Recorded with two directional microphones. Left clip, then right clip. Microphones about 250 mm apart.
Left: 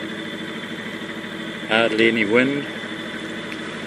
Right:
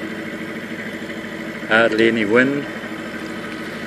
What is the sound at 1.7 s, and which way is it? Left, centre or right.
Speech, centre.